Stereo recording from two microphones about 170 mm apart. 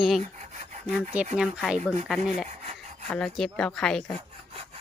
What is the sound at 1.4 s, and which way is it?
Speech, centre (ahead or behind).